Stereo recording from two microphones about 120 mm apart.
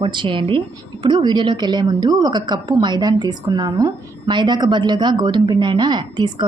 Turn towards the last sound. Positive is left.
turn(degrees=-40)  # may be behind; listen again after turning